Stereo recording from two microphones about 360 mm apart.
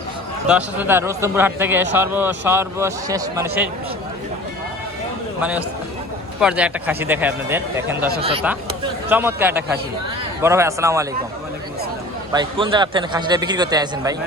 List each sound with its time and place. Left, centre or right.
0.4 s a man's voice: centre
5.4 s a man's voice: centre
8.0 s speech: right
9.0 s a man's voice: centre
12.3 s a man's voice: centre